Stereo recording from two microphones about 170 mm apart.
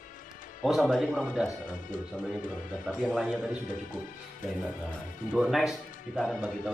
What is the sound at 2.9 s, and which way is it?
Speech, centre (ahead or behind).